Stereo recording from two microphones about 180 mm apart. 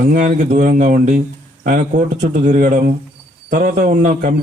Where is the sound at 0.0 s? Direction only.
45° right (ahead or behind).